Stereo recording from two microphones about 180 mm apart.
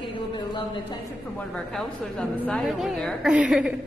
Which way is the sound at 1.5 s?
5° left (ahead or behind).